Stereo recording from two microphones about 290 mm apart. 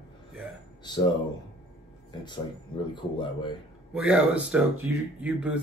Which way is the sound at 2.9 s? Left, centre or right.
Centre.